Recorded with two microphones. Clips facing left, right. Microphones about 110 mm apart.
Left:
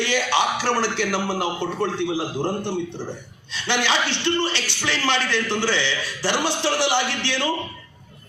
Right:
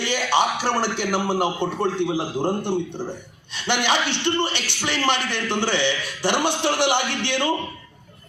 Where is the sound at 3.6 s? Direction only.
15° right (ahead or behind).